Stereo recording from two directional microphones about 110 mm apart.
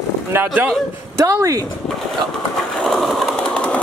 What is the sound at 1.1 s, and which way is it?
Speech, 30° right (ahead or behind).